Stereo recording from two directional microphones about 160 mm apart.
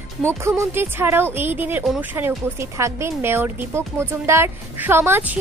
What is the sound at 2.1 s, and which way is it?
Speech, 15° right (ahead or behind).